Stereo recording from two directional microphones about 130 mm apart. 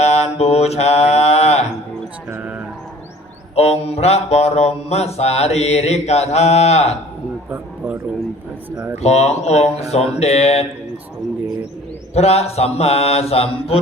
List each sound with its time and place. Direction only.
0.0 s mantra: 55° left (ahead or behind)
2.3 s mantra: 10° right (ahead or behind)
3.5 s mantra: 50° left (ahead or behind)
9.0 s mantra: 55° left (ahead or behind)
12.1 s mantra: 55° left (ahead or behind)